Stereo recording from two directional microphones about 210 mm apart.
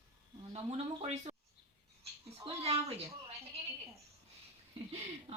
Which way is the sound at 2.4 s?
30° right (ahead or behind).